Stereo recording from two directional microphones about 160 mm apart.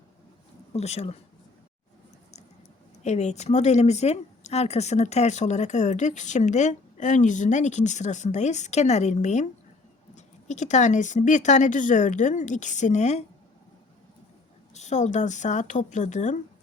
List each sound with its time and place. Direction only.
0.7 s speech: 40° left (ahead or behind)
3.0 s speech: 45° left (ahead or behind)
14.7 s speech: 45° left (ahead or behind)